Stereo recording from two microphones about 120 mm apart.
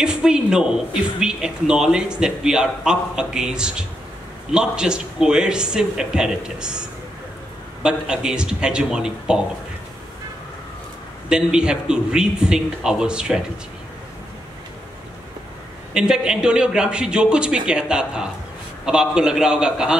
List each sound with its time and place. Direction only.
0.0 s speech: 5° right (ahead or behind)
7.8 s speech: 5° right (ahead or behind)
11.2 s speech: 5° right (ahead or behind)
15.9 s speech: 5° right (ahead or behind)